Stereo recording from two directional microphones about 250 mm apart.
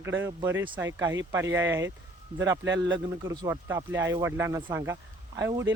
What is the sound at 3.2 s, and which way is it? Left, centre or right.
Speech, centre.